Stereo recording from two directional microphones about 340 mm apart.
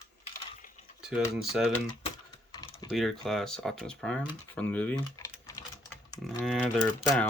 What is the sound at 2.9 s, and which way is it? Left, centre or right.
Speech, centre.